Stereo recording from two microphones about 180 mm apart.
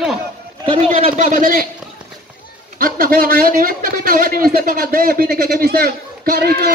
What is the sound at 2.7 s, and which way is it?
A man's voice, 55° right (ahead or behind).